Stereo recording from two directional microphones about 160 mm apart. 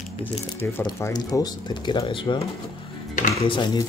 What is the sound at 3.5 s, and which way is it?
Speech, 25° left (ahead or behind).